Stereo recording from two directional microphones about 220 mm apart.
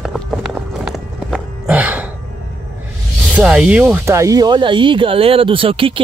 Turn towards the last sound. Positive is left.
turn(degrees=-25)  # may be behind; listen again after turning